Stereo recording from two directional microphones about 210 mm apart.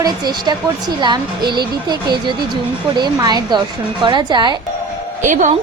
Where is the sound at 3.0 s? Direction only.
20° right (ahead or behind).